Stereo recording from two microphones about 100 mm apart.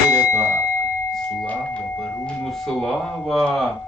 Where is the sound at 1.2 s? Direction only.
15° left (ahead or behind).